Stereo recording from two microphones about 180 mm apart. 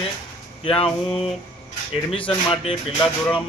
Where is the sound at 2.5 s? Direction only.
30° left (ahead or behind).